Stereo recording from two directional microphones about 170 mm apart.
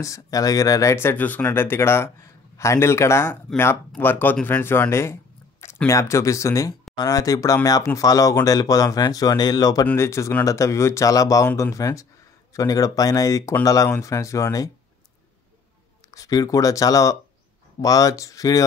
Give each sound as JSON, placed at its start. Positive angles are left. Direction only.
{"t": 0.0, "sound": "speech", "side_deg": 20}
{"t": 16.1, "sound": "speech", "side_deg": 20}